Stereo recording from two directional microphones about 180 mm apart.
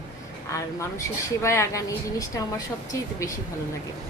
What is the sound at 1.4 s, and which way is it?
A woman's voice, 15° left (ahead or behind).